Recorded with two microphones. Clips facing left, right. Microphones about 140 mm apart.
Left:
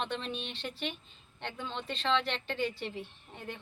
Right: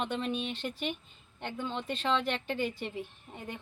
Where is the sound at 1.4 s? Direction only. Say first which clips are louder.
Right 3 dB; 10° right (ahead or behind).